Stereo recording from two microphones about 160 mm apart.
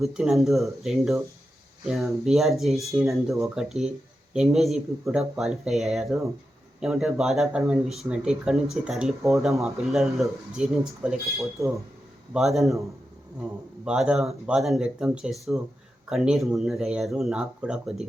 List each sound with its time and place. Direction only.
0.0 s speech: centre (ahead or behind)
12.3 s speech: centre (ahead or behind)
13.8 s speech: 5° right (ahead or behind)